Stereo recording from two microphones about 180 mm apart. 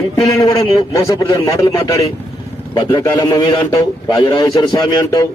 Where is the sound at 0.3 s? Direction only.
20° left (ahead or behind).